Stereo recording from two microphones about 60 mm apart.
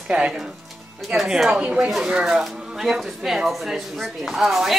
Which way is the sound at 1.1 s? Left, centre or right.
Centre.